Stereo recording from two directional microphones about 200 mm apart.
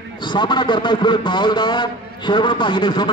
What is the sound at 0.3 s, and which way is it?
A man's voice, 25° left (ahead or behind).